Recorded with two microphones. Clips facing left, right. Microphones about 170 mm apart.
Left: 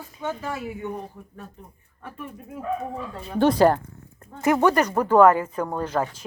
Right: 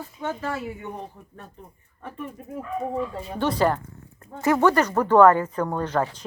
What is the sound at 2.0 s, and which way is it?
Speech, centre (ahead or behind).